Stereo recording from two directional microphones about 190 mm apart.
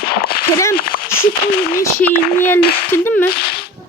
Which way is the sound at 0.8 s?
50° left (ahead or behind).